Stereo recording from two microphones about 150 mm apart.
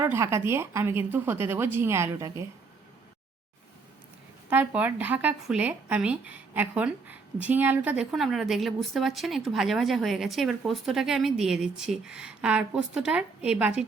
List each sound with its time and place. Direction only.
0.0 s speech: 20° right (ahead or behind)
4.4 s a woman's voice: 10° right (ahead or behind)